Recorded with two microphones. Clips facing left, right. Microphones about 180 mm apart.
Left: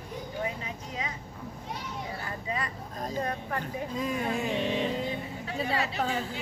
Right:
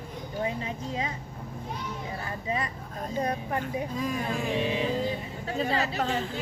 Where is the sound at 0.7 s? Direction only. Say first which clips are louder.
Right 5 dB; 30° right (ahead or behind).